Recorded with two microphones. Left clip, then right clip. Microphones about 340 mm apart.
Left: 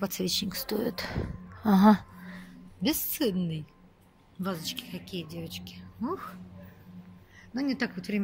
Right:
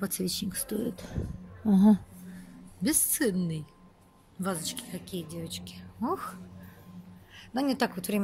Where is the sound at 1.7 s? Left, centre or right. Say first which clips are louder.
Left 3 dB; left.